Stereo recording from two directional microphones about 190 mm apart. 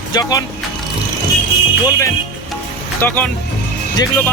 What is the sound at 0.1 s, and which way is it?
Speech, 20° left (ahead or behind).